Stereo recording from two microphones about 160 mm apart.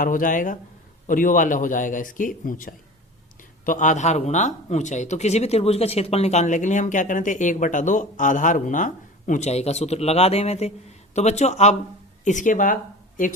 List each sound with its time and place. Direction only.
0.0 s a man's voice: 55° left (ahead or behind)